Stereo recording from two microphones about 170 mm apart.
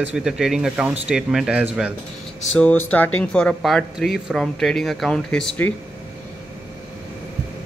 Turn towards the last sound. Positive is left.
turn(degrees=5)  # may be behind; listen again after turning